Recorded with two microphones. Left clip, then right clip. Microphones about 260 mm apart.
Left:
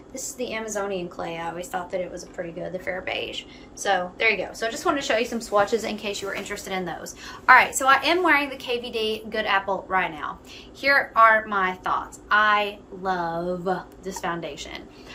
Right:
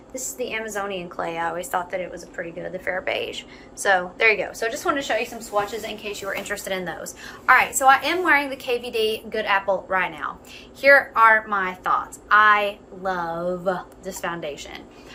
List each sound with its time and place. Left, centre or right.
0.1 s a woman's voice: centre
5.5 s a woman's voice: left
6.0 s a woman's voice: centre